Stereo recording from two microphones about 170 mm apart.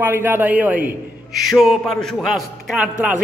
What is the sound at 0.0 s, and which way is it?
A man's voice, 10° right (ahead or behind).